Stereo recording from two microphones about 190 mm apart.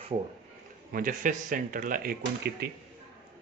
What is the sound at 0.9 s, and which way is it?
A man's voice, 45° right (ahead or behind).